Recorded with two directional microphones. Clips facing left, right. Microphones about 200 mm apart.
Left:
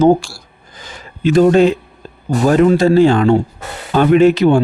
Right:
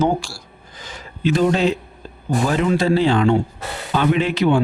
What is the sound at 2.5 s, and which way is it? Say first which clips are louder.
Speech: left 8 dB; 45° left (ahead or behind).